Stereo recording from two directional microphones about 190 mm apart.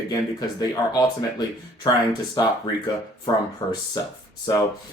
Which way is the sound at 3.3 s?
25° left (ahead or behind).